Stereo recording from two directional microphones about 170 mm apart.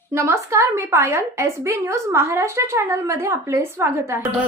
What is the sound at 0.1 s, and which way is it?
A woman's voice, 15° right (ahead or behind).